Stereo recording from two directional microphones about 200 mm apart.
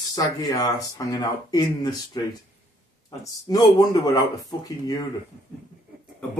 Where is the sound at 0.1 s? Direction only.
20° left (ahead or behind).